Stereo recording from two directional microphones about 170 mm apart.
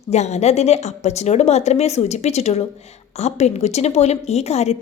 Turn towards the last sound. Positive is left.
turn(degrees=40)  # may be behind; listen again after turning